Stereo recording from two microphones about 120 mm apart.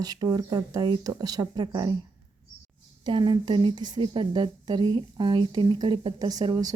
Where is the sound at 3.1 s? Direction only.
40° right (ahead or behind).